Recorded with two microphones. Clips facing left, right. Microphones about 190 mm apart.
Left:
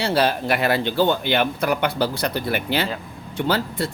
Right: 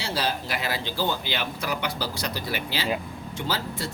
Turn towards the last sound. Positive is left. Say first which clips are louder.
# left 7 dB
turn(degrees=60)  # may be behind; listen again after turning